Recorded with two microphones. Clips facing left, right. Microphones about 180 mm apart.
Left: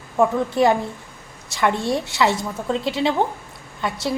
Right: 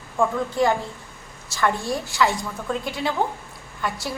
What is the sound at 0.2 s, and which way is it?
A woman's voice, 20° left (ahead or behind).